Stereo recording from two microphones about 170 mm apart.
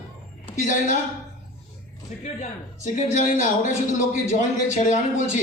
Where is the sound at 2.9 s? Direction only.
45° left (ahead or behind).